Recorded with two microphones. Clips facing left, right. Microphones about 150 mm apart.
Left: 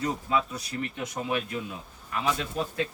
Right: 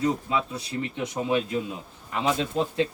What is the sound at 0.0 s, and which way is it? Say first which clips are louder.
Speech: right 2 dB; 25° right (ahead or behind).